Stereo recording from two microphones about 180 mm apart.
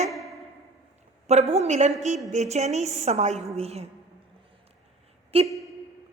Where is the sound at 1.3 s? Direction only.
35° right (ahead or behind).